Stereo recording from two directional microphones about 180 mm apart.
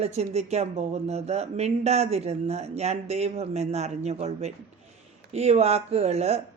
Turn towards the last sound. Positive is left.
turn(degrees=-35)  # may be behind; listen again after turning